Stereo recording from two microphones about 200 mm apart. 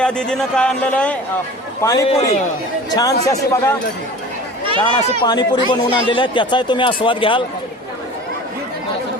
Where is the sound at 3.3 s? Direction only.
15° left (ahead or behind).